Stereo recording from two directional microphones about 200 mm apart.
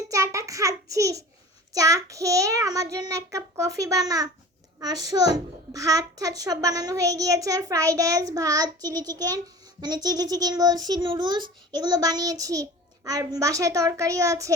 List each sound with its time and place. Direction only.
0.1 s child singing: 15° right (ahead or behind)
1.7 s a child's voice: 15° right (ahead or behind)